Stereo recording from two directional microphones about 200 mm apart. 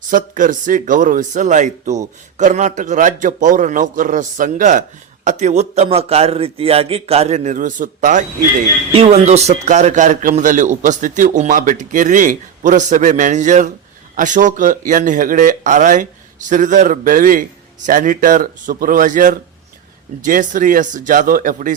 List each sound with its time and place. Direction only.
0.1 s a man's voice: 40° right (ahead or behind)
8.9 s a man's voice: 30° right (ahead or behind)